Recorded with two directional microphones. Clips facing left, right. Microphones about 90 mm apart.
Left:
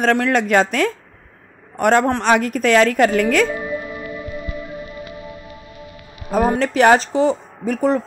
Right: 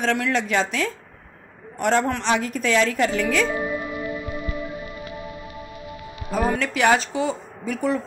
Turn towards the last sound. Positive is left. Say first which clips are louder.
# left 6 dB
turn(degrees=40)  # may be behind; listen again after turning